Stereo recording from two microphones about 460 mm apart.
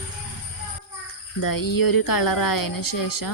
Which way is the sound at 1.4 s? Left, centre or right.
Left.